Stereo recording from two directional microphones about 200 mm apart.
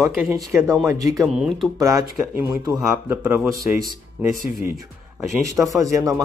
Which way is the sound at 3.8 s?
45° right (ahead or behind).